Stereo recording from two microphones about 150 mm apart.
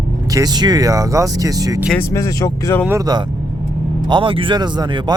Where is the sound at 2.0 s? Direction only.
20° left (ahead or behind).